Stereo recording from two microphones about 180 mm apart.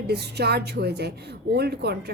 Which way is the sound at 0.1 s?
65° right (ahead or behind).